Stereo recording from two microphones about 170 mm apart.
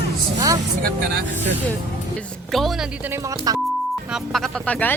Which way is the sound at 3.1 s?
20° right (ahead or behind).